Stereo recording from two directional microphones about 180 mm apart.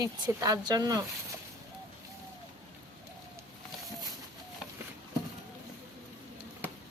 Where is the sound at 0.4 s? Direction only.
20° right (ahead or behind).